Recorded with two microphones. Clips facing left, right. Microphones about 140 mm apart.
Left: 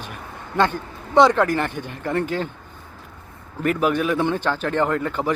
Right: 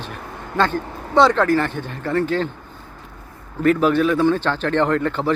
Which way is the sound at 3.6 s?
10° left (ahead or behind).